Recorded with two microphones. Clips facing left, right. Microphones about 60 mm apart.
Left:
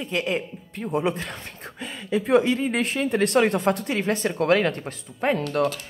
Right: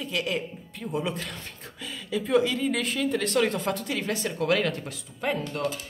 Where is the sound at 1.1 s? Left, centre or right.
Left.